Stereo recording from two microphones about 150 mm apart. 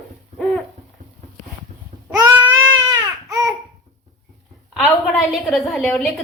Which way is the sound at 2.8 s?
25° right (ahead or behind).